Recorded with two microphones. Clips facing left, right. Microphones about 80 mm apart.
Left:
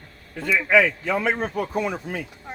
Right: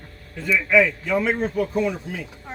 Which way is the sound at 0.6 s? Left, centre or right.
Left.